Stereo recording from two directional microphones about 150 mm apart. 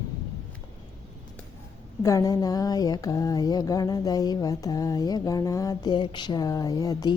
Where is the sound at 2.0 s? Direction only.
20° left (ahead or behind).